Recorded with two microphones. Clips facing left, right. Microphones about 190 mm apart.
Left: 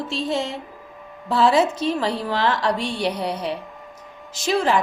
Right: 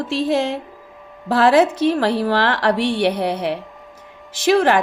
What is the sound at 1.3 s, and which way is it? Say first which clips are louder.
A woman's voice: right 4 dB; 75° right (ahead or behind).